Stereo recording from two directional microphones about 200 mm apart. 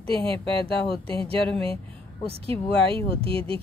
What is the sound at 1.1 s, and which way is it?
Speech, 25° right (ahead or behind).